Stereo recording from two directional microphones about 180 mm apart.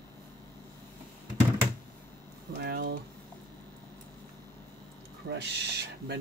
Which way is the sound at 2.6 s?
60° right (ahead or behind).